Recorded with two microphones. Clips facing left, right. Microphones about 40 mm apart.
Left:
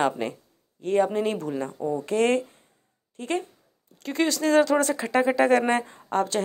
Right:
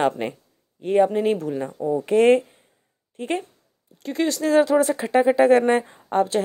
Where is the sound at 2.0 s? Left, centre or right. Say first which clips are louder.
Right 7 dB; right.